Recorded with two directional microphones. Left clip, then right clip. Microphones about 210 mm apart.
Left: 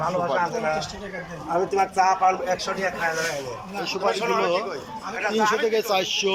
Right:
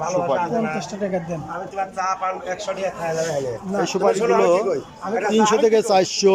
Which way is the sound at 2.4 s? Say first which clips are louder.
Left 2 dB; 5° left (ahead or behind).